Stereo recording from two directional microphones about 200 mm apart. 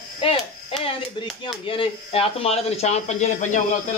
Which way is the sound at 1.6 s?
30° left (ahead or behind).